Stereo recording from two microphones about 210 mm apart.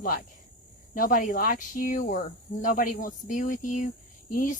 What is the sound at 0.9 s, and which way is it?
Speech, 40° left (ahead or behind).